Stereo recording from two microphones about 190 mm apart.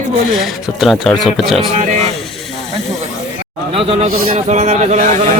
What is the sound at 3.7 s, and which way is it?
A man's voice, 30° right (ahead or behind).